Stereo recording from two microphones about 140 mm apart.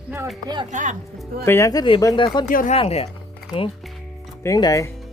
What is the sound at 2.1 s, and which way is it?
Speech, 35° left (ahead or behind).